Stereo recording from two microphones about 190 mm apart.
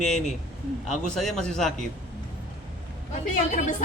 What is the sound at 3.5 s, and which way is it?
Speech, 40° left (ahead or behind).